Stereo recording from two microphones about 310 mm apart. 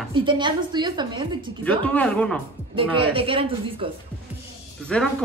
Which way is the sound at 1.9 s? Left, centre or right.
Centre.